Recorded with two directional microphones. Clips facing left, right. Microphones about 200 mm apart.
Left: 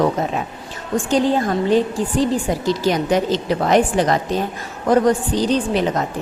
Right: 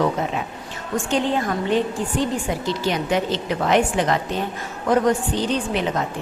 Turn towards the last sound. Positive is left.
turn(degrees=35)  # may be behind; listen again after turning